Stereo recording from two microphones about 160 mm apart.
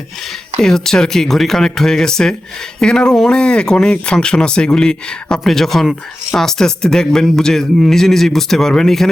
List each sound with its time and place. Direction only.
0.6 s speech: 5° left (ahead or behind)